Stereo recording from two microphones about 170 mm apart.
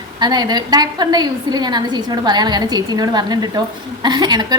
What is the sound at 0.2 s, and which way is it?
A woman's voice, 25° right (ahead or behind).